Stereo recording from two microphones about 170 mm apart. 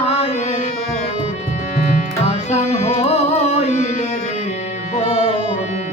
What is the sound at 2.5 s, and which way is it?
Music, 40° left (ahead or behind).